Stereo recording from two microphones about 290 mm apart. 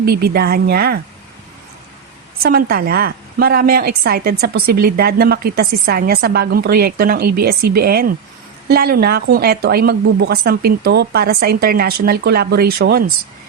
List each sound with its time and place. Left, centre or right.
0.0 s a woman's voice: right
2.4 s a woman's voice: right